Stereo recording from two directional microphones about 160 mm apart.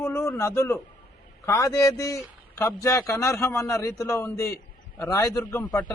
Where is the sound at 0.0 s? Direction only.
20° left (ahead or behind).